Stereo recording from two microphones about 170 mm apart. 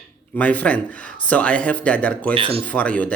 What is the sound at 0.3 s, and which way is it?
Speech, 10° left (ahead or behind).